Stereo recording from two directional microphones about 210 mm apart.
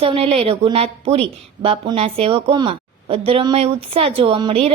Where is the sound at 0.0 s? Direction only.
25° right (ahead or behind).